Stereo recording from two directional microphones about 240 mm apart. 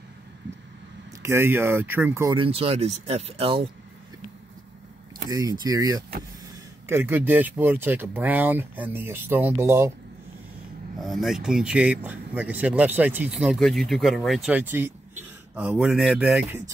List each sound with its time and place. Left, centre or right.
1.2 s speech: centre
5.3 s speech: centre
11.0 s speech: centre